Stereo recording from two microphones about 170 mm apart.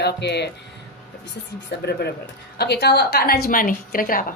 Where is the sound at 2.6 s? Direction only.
75° left (ahead or behind); by 4.2 s 55° left (ahead or behind).